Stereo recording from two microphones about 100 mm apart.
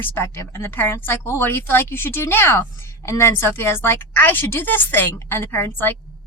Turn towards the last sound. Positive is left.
turn(degrees=20)  # may be behind; listen again after turning